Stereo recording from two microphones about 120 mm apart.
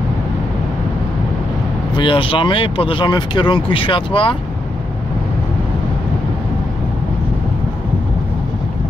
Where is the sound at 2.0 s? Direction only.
45° left (ahead or behind).